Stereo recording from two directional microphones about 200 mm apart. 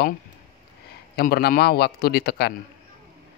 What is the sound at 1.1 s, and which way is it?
Speech, 50° left (ahead or behind).